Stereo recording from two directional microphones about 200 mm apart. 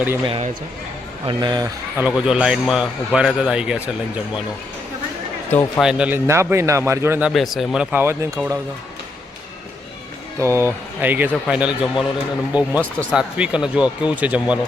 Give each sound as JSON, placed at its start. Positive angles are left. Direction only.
{"t": 0.3, "sound": "speech", "side_deg": -30}
{"t": 2.0, "sound": "a man's voice", "side_deg": -5}
{"t": 5.5, "sound": "speech", "side_deg": 10}
{"t": 5.8, "sound": "speech", "side_deg": -5}
{"t": 10.4, "sound": "a man's voice", "side_deg": -15}